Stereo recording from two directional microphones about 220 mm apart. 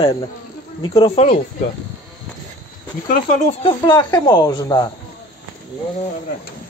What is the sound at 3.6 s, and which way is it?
Speech, 25° left (ahead or behind).